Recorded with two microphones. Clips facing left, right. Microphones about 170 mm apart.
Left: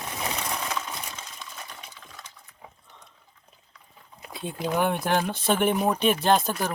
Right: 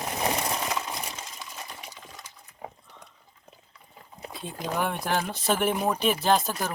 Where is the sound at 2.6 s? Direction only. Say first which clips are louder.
Right 8 dB; 70° right (ahead or behind).